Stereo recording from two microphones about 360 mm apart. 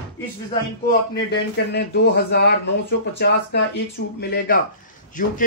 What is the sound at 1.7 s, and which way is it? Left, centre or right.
Speech, left.